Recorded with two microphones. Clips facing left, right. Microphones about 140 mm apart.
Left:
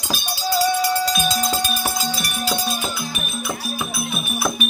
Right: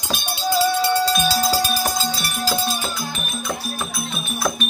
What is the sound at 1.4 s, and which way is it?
Music, 5° right (ahead or behind).